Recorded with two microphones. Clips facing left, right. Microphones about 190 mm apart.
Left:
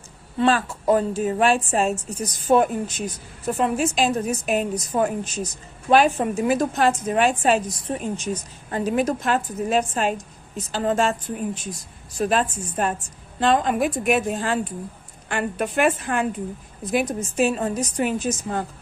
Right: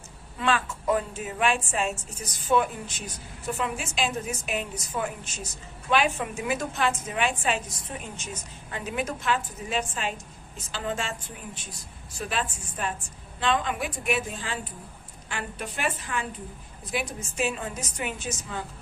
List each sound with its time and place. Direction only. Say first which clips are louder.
0.3 s a woman's voice: left 7 dB; 35° left (ahead or behind); by 16.2 s 55° left (ahead or behind)
16.9 s a woman's voice: left 9 dB; 45° left (ahead or behind)